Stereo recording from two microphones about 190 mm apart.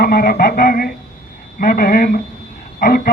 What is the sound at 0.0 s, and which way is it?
Speech, 50° left (ahead or behind).